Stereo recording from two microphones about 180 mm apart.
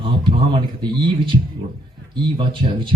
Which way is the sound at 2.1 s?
30° right (ahead or behind).